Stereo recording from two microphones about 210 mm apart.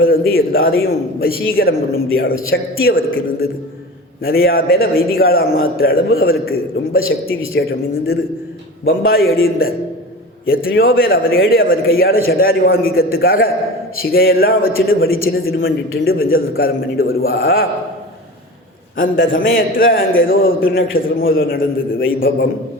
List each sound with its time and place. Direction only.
0.0 s speech: 45° left (ahead or behind)
8.9 s speech: 45° left (ahead or behind)
18.9 s speech: 45° left (ahead or behind)